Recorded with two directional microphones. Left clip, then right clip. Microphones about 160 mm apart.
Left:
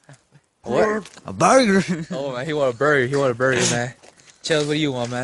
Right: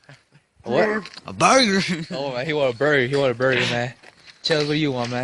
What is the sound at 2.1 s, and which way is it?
Speech, 15° right (ahead or behind).